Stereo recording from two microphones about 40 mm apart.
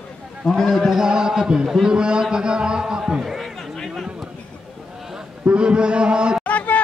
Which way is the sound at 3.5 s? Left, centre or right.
Centre.